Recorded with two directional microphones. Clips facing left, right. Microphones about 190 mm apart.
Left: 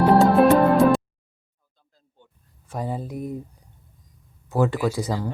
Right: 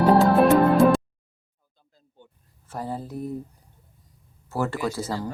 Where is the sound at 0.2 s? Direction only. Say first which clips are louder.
Left 1 dB; centre (ahead or behind).